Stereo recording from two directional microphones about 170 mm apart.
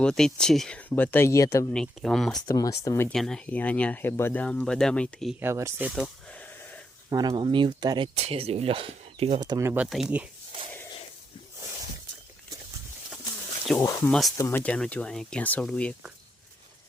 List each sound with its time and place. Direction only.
0.0 s speech: 5° left (ahead or behind)
1.7 s speech: 5° left (ahead or behind)
2.5 s speech: 20° left (ahead or behind)
3.1 s speech: 5° left (ahead or behind)
5.4 s speech: 15° right (ahead or behind)
5.9 s a sound: 5° left (ahead or behind)
7.1 s speech: 25° right (ahead or behind)
9.4 s speech: 20° right (ahead or behind)
9.8 s speech: 5° right (ahead or behind)
13.7 s speech: 15° left (ahead or behind)
14.1 s speech: centre (ahead or behind)
14.3 s speech: 15° left (ahead or behind)